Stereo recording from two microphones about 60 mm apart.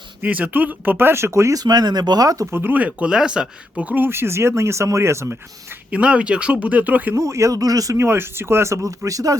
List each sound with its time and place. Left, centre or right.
0.2 s speech: right
1.5 s speech: right
2.5 s speech: right
2.7 s speech: right
3.9 s speech: right
5.9 s speech: centre
7.2 s speech: right
7.9 s speech: right